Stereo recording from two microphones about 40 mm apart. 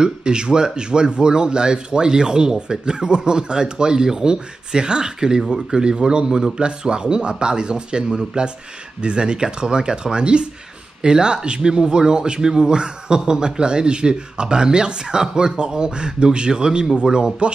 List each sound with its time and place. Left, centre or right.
0.0 s speech: right